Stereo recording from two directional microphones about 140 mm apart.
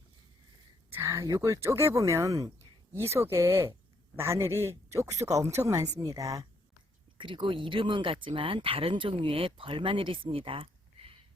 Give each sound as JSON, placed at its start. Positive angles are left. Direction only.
{"t": 0.9, "sound": "speech", "side_deg": -20}
{"t": 7.2, "sound": "speech", "side_deg": -35}